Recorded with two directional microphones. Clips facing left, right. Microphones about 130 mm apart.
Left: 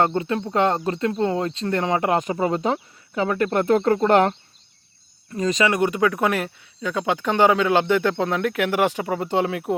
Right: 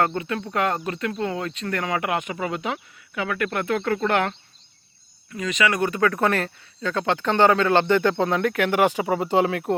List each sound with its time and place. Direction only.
0.0 s speech: 30° left (ahead or behind)
5.7 s speech: 20° left (ahead or behind); by 9.7 s centre (ahead or behind)